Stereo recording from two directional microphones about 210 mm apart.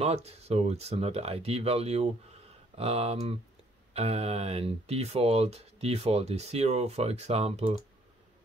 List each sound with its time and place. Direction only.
0.0 s speech: 30° right (ahead or behind)